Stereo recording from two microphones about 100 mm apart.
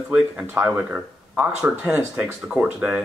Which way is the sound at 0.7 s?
15° right (ahead or behind).